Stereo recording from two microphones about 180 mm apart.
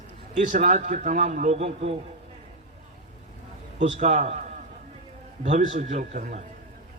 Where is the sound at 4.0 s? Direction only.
40° right (ahead or behind).